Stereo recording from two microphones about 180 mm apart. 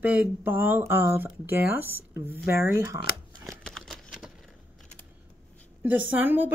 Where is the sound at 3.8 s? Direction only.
Centre (ahead or behind).